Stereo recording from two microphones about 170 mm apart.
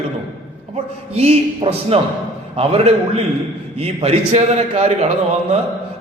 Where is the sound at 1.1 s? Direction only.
35° right (ahead or behind).